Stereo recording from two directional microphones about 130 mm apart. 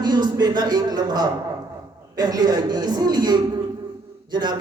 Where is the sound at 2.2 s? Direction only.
30° right (ahead or behind).